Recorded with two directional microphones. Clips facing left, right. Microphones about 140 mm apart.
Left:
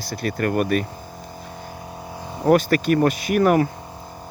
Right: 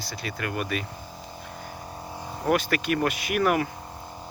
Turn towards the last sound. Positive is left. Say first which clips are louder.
# left 6 dB
turn(degrees=35)  # may be behind; listen again after turning